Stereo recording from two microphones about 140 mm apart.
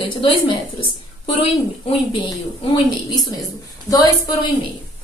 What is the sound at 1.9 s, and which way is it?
A woman's voice, 30° left (ahead or behind).